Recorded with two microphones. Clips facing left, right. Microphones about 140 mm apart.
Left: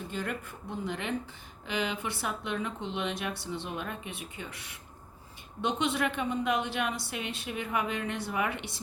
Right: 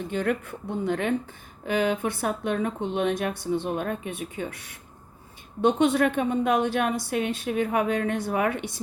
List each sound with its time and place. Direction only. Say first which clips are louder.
0.1 s speech: right 10 dB; 55° right (ahead or behind)